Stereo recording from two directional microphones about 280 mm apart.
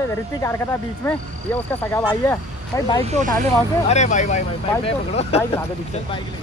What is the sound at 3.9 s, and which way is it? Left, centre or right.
Speech, left.